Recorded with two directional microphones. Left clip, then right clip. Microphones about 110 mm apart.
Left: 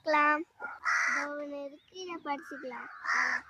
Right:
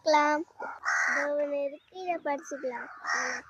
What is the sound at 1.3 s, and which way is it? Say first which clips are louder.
A child's voice: right 10 dB; 10° left (ahead or behind).